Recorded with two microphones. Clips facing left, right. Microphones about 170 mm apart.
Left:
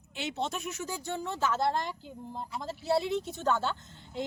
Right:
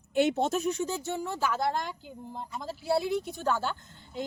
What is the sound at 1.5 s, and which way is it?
Speech, centre (ahead or behind).